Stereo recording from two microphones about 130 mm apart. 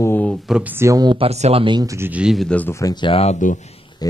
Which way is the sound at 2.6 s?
20° left (ahead or behind).